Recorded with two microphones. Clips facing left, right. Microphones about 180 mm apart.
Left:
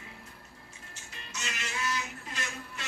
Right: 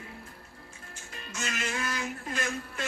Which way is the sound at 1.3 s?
50° right (ahead or behind).